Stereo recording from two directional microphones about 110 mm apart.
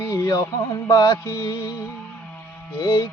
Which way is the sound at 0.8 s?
20° left (ahead or behind).